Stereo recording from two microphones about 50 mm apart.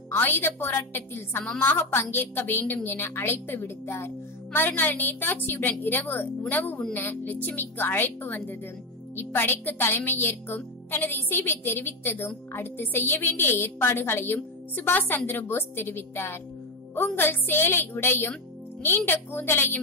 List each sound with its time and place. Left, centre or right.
0.1 s a woman's voice: left